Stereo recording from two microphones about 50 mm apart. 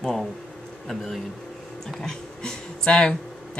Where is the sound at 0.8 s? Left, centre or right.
Centre.